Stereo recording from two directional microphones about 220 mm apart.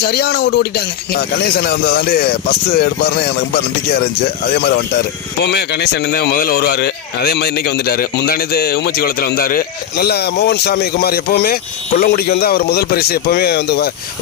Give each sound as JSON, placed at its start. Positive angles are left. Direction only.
{"t": 0.0, "sound": "speech", "side_deg": 45}
{"t": 4.4, "sound": "speech", "side_deg": 45}